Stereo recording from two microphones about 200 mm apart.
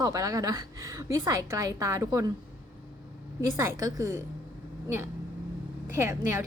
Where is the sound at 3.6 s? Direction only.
15° right (ahead or behind).